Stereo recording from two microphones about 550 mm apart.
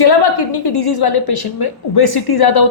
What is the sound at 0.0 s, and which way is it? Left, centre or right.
A woman's voice, left.